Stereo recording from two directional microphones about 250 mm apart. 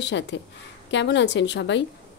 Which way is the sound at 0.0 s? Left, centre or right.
Left.